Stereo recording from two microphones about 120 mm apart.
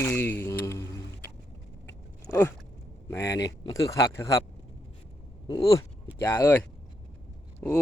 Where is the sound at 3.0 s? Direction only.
25° left (ahead or behind).